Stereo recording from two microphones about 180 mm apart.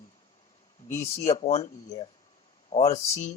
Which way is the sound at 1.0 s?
35° left (ahead or behind).